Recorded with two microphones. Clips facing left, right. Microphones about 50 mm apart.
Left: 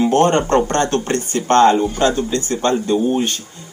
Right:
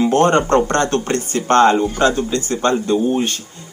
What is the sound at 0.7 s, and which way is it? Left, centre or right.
A man's voice, right.